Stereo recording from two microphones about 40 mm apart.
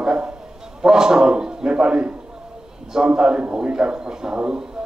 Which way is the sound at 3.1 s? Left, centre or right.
Right.